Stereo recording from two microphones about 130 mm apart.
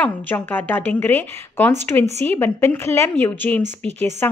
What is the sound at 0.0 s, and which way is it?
A woman's voice, 15° left (ahead or behind).